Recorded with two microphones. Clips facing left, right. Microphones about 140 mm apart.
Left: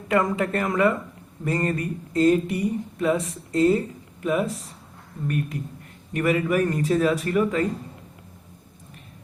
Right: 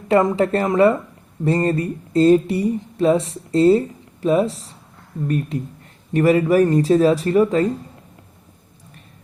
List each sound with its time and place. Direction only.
0.1 s speech: 30° right (ahead or behind)
6.1 s speech: 35° right (ahead or behind)